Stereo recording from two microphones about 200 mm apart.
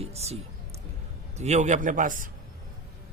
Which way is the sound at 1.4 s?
35° right (ahead or behind).